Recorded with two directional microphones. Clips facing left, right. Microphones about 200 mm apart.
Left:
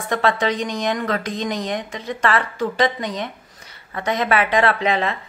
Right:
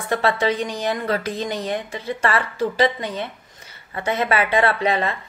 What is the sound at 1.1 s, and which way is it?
Speech, 5° right (ahead or behind).